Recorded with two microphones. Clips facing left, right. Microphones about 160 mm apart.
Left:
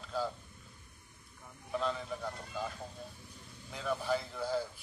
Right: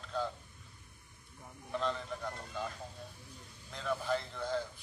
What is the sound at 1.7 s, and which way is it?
Speech, 5° left (ahead or behind).